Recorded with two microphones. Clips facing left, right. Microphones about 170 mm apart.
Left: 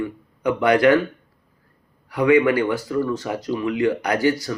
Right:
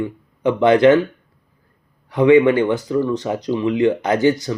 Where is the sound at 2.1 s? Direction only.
20° right (ahead or behind).